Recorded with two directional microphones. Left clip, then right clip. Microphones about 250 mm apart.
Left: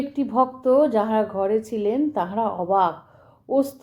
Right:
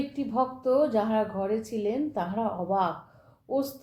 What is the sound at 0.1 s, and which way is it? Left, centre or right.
A woman's voice, left.